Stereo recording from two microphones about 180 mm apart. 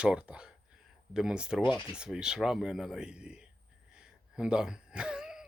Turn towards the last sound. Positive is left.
turn(degrees=-5)  # may be behind; listen again after turning